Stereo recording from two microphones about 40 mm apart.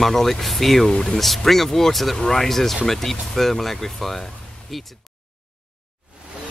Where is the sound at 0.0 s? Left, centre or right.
Centre.